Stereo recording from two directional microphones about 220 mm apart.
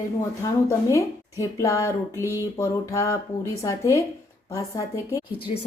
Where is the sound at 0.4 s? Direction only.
15° left (ahead or behind).